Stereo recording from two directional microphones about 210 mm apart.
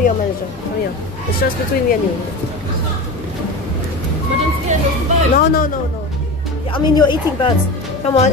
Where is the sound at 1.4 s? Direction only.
50° left (ahead or behind).